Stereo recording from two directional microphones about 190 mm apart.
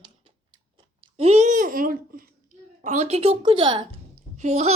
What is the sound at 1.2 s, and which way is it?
Babbling, 35° right (ahead or behind).